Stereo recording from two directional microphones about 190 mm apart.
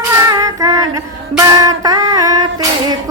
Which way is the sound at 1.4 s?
20° right (ahead or behind).